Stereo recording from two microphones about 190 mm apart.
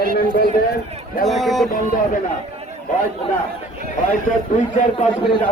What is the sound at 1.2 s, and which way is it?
Speech, centre (ahead or behind).